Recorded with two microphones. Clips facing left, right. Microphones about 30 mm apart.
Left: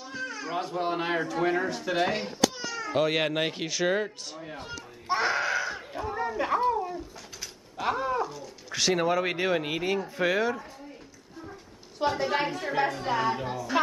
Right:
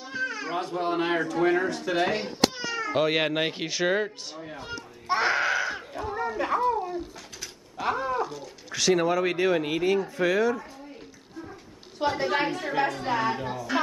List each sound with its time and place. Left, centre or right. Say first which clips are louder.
0.0 s a sound: right 4 dB; centre
0.6 s a man's voice: right 2 dB; centre
2.5 s cat: right 4 dB; centre
2.9 s speech: right 1 dB; centre
4.6 s a sound: right 2 dB; centre
7.7 s cat: right 1 dB; centre
8.7 s speech: right 2 dB; centre
12.3 s a man's voice: right 2 dB; centre